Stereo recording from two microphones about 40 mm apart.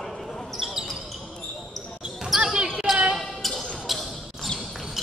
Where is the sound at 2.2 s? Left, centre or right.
Centre.